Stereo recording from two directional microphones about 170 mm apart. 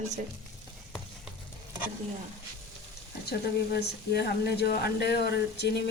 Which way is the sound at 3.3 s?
70° left (ahead or behind).